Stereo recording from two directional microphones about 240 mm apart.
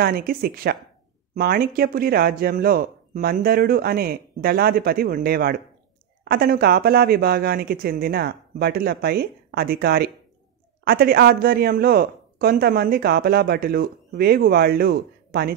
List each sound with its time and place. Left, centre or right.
0.0 s speech: right